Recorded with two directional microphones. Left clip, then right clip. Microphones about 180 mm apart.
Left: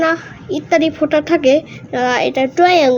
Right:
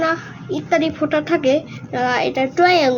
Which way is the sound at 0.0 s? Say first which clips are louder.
Left 4 dB; 35° left (ahead or behind).